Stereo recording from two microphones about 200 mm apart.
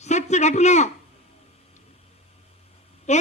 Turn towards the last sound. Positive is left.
turn(degrees=35)  # may be behind; listen again after turning